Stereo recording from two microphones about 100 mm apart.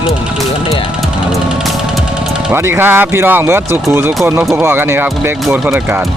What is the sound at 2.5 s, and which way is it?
Speech, 25° right (ahead or behind).